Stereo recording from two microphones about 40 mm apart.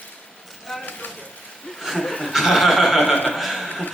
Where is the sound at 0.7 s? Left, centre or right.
Centre.